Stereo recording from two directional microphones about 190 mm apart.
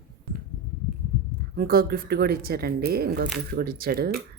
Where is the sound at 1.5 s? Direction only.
50° right (ahead or behind).